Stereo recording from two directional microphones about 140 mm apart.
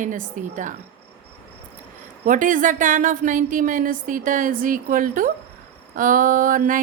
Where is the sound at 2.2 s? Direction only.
65° right (ahead or behind).